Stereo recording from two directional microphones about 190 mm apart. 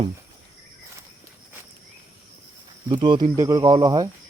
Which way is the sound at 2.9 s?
25° right (ahead or behind).